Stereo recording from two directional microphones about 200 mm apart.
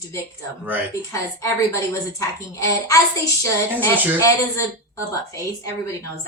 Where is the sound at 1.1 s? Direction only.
15° left (ahead or behind).